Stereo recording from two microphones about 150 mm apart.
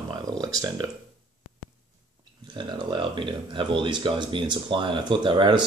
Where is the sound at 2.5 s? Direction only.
30° right (ahead or behind).